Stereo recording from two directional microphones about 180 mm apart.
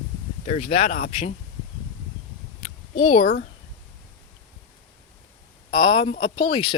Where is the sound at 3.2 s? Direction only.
50° left (ahead or behind).